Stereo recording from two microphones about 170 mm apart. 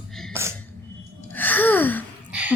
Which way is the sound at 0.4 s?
15° right (ahead or behind).